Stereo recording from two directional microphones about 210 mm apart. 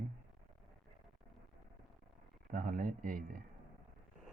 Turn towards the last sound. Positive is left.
turn(degrees=-40)  # may be behind; listen again after turning